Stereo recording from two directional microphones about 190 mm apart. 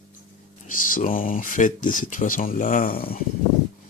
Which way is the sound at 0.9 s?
45° left (ahead or behind).